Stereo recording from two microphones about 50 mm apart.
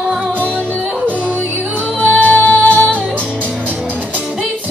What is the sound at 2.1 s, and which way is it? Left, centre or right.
Music, left.